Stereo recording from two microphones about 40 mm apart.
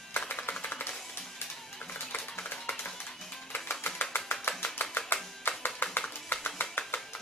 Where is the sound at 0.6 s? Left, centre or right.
Left.